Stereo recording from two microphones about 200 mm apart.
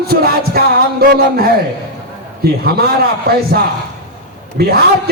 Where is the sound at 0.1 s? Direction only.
50° right (ahead or behind).